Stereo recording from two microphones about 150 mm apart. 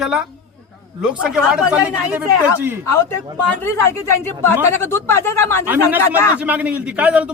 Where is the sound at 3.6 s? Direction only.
20° left (ahead or behind).